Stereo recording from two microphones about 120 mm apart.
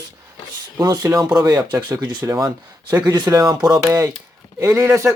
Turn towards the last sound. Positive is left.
turn(degrees=-25)  # may be behind; listen again after turning